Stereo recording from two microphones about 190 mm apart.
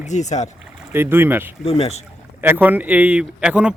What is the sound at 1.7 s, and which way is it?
Speech, 35° left (ahead or behind).